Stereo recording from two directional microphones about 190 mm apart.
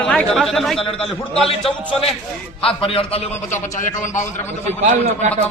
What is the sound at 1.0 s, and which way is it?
A man's voice, 30° left (ahead or behind).